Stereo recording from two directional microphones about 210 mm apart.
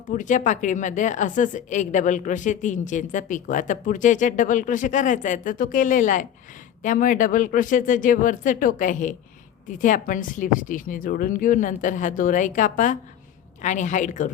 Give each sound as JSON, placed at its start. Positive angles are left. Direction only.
{"t": 0.1, "sound": "a woman's voice", "side_deg": 35}